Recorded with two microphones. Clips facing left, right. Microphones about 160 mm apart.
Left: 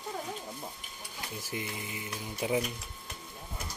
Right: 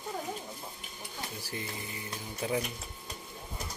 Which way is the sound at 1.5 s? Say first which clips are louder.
Left 3 dB; 15° left (ahead or behind).